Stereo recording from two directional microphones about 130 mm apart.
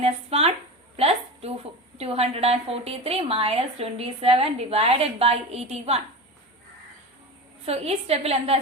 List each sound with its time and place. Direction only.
0.0 s a woman's voice: 50° right (ahead or behind)
0.9 s a sound: 50° right (ahead or behind)
2.0 s a woman's voice: 50° right (ahead or behind)
7.6 s a woman's voice: 50° right (ahead or behind)